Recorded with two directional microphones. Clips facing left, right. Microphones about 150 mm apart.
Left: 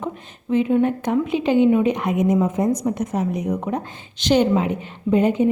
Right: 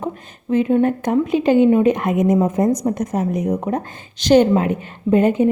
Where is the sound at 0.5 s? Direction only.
45° right (ahead or behind).